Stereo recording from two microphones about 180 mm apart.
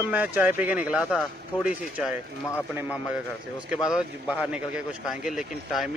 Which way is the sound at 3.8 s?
5° right (ahead or behind).